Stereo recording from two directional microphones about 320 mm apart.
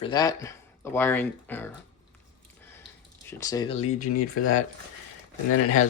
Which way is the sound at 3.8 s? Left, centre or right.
Left.